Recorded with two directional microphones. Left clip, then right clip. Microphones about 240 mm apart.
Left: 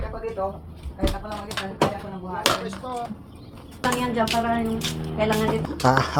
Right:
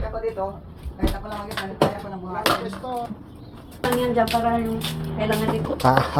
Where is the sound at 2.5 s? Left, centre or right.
Left.